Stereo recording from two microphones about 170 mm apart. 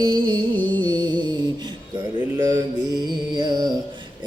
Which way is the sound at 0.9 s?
25° right (ahead or behind).